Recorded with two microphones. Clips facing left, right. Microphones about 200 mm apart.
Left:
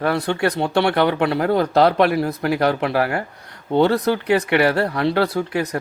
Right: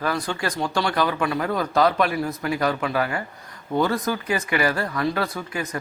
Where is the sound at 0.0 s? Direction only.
65° left (ahead or behind).